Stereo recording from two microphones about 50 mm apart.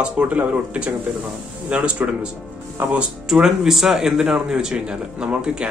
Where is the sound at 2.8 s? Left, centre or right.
Right.